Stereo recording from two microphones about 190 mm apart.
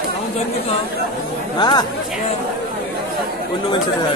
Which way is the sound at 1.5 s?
25° left (ahead or behind).